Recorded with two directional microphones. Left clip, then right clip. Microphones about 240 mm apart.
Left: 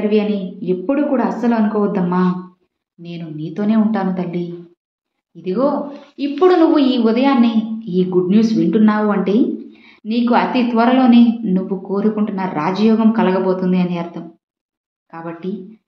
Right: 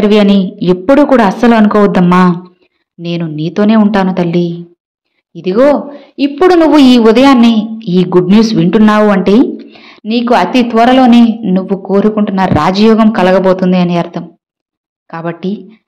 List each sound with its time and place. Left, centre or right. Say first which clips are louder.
0.1 s a woman's voice: right 9 dB; right